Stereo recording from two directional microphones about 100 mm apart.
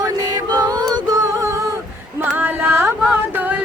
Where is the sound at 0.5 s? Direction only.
40° right (ahead or behind).